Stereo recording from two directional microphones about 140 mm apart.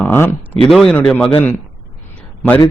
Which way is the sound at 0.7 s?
Centre (ahead or behind).